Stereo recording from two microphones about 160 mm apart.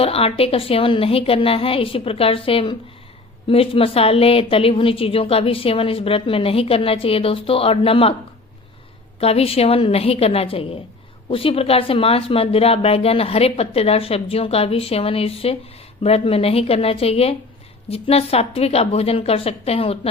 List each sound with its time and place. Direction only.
0.0 s a woman's voice: 35° left (ahead or behind)
9.2 s a woman's voice: 40° left (ahead or behind)